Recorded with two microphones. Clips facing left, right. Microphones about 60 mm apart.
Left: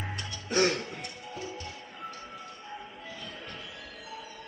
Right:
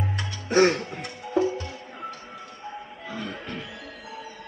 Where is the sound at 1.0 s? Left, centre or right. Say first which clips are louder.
Right 14 dB; right.